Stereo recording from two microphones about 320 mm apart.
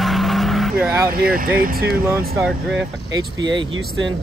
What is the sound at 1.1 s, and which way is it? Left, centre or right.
Speech, right.